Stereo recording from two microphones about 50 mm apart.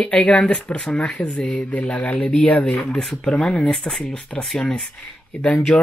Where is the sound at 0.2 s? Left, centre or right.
Left.